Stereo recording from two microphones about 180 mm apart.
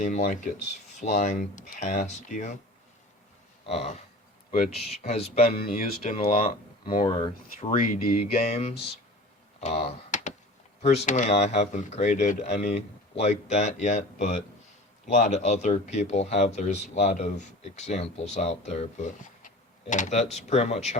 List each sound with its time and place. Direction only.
0.0 s speech: 45° left (ahead or behind)
3.7 s speech: 35° left (ahead or behind)
5.0 s speech: 35° left (ahead or behind)
5.6 s speech: 55° left (ahead or behind)
7.0 s speech: 30° left (ahead or behind)
7.7 s speech: 50° left (ahead or behind)
8.3 s speech: 35° left (ahead or behind)
9.6 s typing: 35° left (ahead or behind)
10.8 s speech: 40° left (ahead or behind)